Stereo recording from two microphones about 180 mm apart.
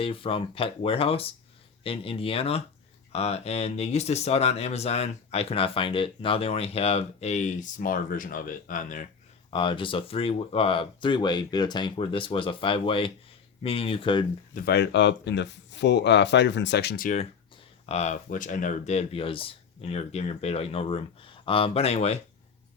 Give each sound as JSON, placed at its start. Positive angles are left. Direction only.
{"t": 0.0, "sound": "speech", "side_deg": 30}
{"t": 9.5, "sound": "speech", "side_deg": 30}
{"t": 14.5, "sound": "speech", "side_deg": 60}
{"t": 17.8, "sound": "speech", "side_deg": 40}